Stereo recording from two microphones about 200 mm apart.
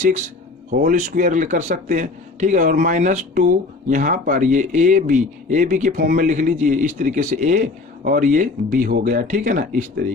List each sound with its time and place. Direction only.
0.7 s a man's voice: 40° right (ahead or behind)